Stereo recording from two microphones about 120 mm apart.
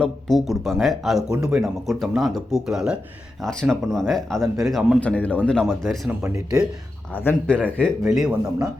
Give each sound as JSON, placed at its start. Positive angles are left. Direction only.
{"t": 0.0, "sound": "speech", "side_deg": 0}
{"t": 4.9, "sound": "speech", "side_deg": 10}
{"t": 6.1, "sound": "speech", "side_deg": -20}
{"t": 7.1, "sound": "speech", "side_deg": 15}
{"t": 8.1, "sound": "speech", "side_deg": -5}